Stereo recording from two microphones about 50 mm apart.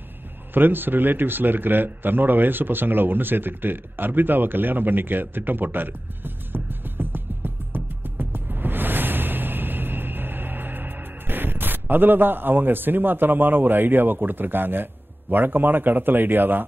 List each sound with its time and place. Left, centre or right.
0.6 s a man's voice: right